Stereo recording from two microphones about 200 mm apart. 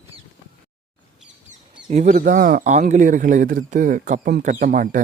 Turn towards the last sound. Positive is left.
turn(degrees=-40)  # may be behind; listen again after turning